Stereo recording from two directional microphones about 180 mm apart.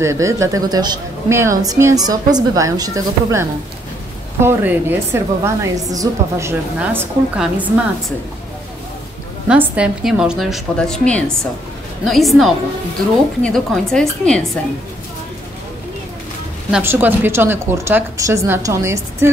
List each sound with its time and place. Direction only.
0.0 s a woman's voice: 15° right (ahead or behind)
9.5 s a woman's voice: 5° right (ahead or behind)
16.7 s a woman's voice: 10° right (ahead or behind)